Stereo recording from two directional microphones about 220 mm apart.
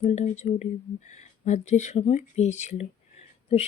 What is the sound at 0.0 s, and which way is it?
A woman's voice, 30° left (ahead or behind).